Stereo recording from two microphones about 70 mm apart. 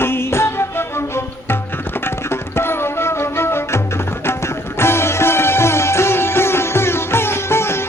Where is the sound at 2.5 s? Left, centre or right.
Left.